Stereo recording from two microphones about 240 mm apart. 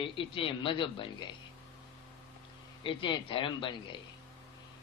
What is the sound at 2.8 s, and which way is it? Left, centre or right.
A man's voice, centre.